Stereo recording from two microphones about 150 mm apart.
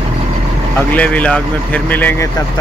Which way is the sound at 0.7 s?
10° left (ahead or behind).